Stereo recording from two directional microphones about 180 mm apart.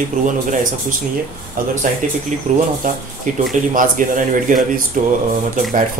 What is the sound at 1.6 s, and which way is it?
Speech, 50° right (ahead or behind).